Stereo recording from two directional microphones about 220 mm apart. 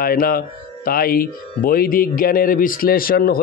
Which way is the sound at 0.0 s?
40° left (ahead or behind).